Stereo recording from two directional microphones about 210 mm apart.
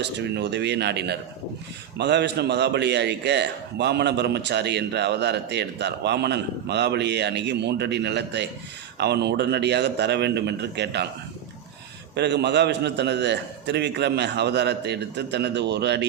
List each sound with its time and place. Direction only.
0.0 s a man's voice: 55° right (ahead or behind)
12.1 s a man's voice: 55° right (ahead or behind)